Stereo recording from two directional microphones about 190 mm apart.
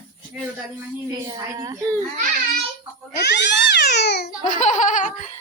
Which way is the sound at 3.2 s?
65° left (ahead or behind).